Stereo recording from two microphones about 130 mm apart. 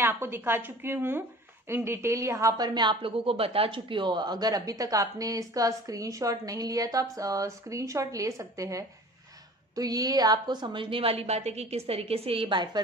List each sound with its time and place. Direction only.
0.0 s a woman's voice: 15° right (ahead or behind); by 12.8 s 35° right (ahead or behind)